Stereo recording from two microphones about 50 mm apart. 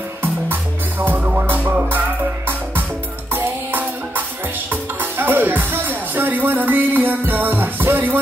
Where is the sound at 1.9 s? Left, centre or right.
Right.